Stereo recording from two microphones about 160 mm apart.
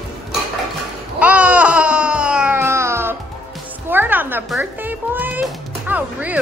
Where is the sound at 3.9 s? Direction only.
10° right (ahead or behind).